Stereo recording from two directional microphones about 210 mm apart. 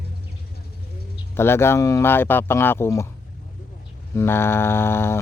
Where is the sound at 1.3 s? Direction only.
10° left (ahead or behind).